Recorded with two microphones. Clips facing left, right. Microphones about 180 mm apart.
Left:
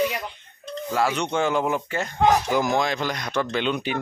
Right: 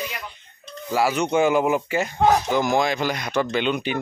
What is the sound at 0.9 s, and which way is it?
Speech, 5° right (ahead or behind).